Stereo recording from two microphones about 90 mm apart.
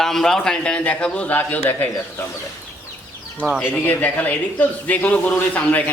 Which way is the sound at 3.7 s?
15° left (ahead or behind).